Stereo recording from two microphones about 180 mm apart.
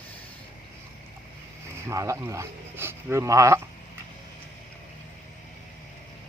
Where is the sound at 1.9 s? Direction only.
20° right (ahead or behind).